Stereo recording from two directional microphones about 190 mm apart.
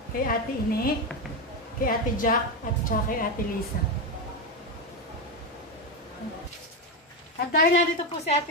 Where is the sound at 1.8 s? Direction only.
45° left (ahead or behind).